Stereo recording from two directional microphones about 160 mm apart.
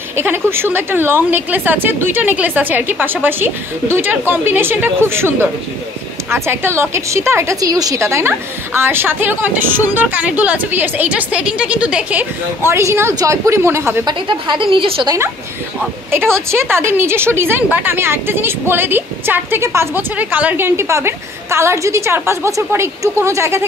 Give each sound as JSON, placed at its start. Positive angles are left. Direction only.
{"t": 0.1, "sound": "a woman's voice", "side_deg": -15}
{"t": 14.2, "sound": "a woman's voice", "side_deg": -30}
{"t": 16.1, "sound": "a woman's voice", "side_deg": -15}